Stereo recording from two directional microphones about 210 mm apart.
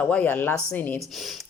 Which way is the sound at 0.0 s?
5° left (ahead or behind).